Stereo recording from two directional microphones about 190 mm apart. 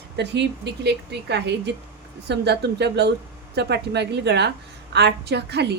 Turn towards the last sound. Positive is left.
turn(degrees=-60)  # may be behind; listen again after turning